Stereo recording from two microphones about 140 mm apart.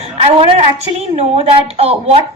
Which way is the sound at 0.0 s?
45° right (ahead or behind).